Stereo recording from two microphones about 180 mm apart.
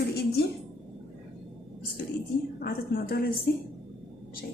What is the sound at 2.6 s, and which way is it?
A woman's voice, 55° left (ahead or behind).